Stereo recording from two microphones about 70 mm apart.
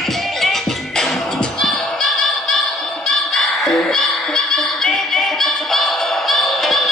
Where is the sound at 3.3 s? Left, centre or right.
Centre.